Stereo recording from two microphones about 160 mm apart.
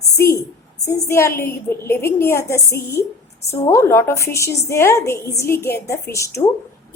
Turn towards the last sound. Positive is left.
turn(degrees=20)  # may be behind; listen again after turning